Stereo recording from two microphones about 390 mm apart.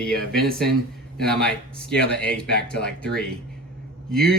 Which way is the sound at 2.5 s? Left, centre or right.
Left.